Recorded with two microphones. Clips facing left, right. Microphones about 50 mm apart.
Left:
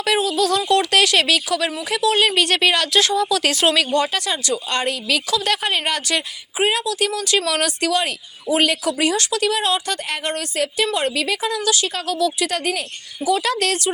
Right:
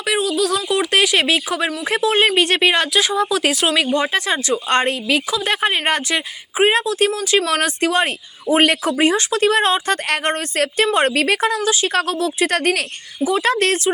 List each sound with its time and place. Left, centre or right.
0.0 s speech: centre
0.9 s speech: centre
2.9 s speech: centre
3.5 s speech: centre
3.8 s speech: right
8.9 s speech: right
10.5 s speech: right
11.6 s speech: right
11.9 s speech: right
13.2 s speech: right